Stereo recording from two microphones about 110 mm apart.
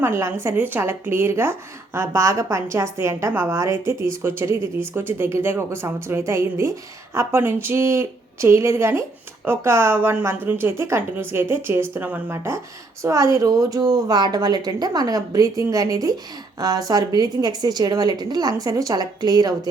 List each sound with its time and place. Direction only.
0.0 s a woman's voice: 25° right (ahead or behind)